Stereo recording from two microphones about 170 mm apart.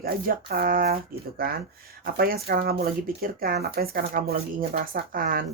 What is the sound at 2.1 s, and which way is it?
Speech, 60° right (ahead or behind).